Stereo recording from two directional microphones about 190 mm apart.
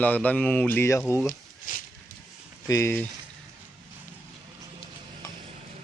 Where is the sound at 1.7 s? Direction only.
50° left (ahead or behind).